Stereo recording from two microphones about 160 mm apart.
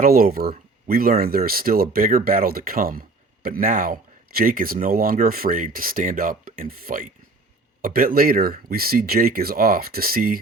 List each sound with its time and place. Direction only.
0.0 s speech: 65° right (ahead or behind)